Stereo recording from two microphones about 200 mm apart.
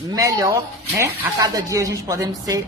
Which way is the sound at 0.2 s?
15° right (ahead or behind).